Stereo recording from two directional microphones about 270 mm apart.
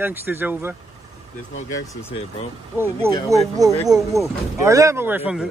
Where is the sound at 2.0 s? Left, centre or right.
Left.